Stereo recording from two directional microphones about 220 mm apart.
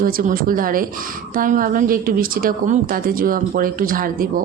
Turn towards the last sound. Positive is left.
turn(degrees=-40)  # may be behind; listen again after turning